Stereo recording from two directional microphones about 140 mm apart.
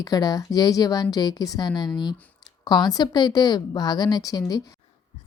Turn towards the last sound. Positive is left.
turn(degrees=25)  # may be behind; listen again after turning